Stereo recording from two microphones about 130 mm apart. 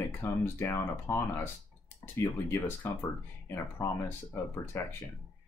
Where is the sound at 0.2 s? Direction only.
20° left (ahead or behind).